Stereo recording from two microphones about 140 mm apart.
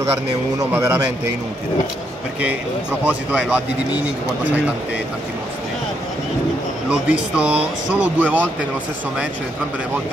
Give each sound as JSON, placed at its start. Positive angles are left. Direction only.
{"t": 0.6, "sound": "a man's voice", "side_deg": -20}
{"t": 3.1, "sound": "speech", "side_deg": -10}
{"t": 6.9, "sound": "speech", "side_deg": -10}